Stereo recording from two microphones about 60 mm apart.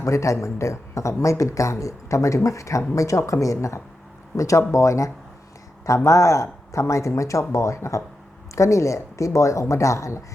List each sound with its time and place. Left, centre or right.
0.0 s speech: left